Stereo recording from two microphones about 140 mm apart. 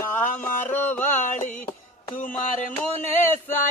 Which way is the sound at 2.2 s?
65° left (ahead or behind).